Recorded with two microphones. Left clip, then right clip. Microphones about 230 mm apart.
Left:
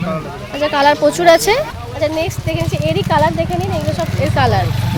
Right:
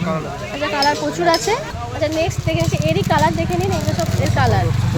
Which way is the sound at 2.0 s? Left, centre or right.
Left.